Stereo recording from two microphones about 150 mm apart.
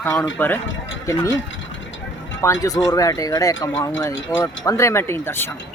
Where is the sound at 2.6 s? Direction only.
20° left (ahead or behind).